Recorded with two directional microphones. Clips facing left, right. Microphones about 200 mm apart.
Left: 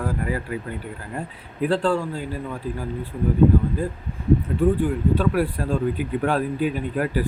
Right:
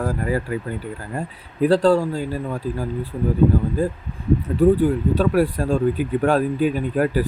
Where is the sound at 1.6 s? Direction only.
40° right (ahead or behind).